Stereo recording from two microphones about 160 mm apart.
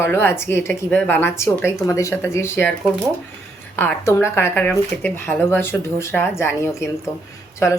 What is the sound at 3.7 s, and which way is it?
Speech, 10° left (ahead or behind).